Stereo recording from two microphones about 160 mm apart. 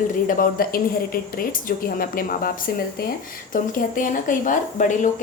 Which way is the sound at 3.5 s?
55° left (ahead or behind).